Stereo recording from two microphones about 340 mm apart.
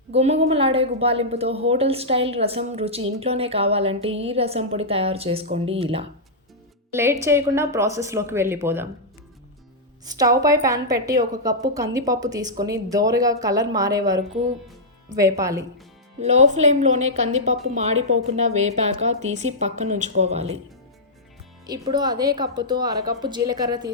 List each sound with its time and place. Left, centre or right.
0.1 s a woman's voice: centre
10.1 s a woman's voice: centre
16.2 s a woman's voice: centre
21.7 s a woman's voice: centre